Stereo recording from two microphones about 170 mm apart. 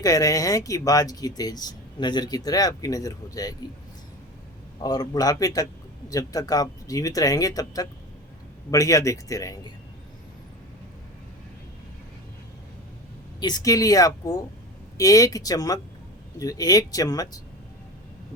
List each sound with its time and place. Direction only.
0.0 s speech: 20° left (ahead or behind)
4.8 s speech: 20° left (ahead or behind)
13.4 s speech: 20° left (ahead or behind)